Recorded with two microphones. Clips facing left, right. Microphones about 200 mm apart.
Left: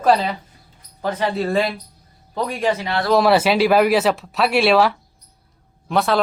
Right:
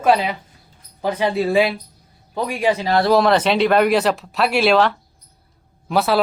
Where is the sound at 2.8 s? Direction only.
35° right (ahead or behind).